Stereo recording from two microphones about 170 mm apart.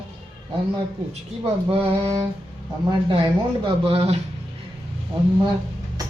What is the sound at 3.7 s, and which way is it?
Speech, 35° right (ahead or behind).